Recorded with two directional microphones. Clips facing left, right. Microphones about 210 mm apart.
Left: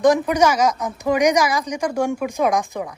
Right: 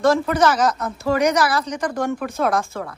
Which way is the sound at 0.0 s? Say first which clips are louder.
Left 1 dB; 15° left (ahead or behind).